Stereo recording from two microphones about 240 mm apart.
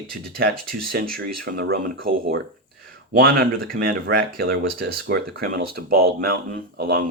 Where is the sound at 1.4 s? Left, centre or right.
Right.